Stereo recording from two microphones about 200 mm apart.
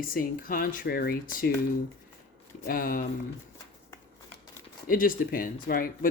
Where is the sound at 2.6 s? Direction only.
45° left (ahead or behind).